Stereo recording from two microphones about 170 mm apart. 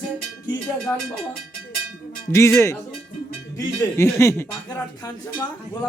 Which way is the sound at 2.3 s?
15° left (ahead or behind).